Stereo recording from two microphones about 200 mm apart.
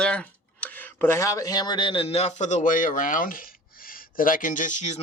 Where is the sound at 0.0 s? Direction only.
5° left (ahead or behind).